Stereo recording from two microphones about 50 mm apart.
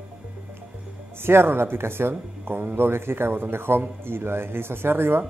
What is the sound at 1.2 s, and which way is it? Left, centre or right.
Speech, right.